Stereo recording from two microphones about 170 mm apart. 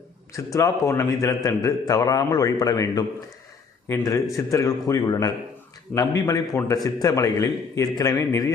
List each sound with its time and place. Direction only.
0.3 s a man's voice: 20° left (ahead or behind)